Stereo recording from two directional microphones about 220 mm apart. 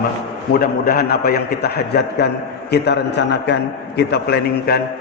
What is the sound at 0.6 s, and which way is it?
A man's voice, 40° left (ahead or behind).